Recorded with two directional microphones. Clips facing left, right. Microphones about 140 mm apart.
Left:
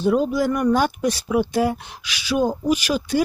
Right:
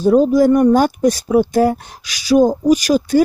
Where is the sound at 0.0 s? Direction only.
40° right (ahead or behind).